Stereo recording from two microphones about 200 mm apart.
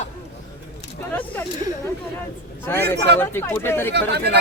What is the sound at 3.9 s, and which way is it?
Speech, 55° right (ahead or behind).